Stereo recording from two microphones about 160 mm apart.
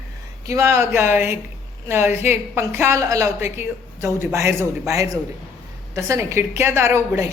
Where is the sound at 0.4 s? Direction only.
20° right (ahead or behind).